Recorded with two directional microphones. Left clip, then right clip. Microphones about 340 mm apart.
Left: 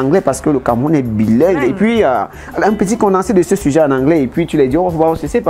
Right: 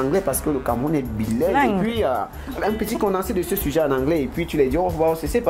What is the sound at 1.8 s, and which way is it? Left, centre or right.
Speech, left.